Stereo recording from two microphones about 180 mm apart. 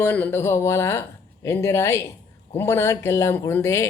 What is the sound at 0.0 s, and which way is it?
A man's voice, 10° left (ahead or behind).